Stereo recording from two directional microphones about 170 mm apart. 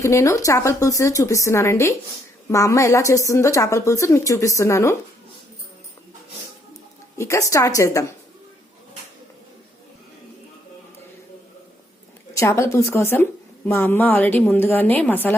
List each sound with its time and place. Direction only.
0.0 s a woman's voice: 15° left (ahead or behind)
7.2 s a woman's voice: 15° left (ahead or behind)
12.3 s a woman's voice: 15° left (ahead or behind)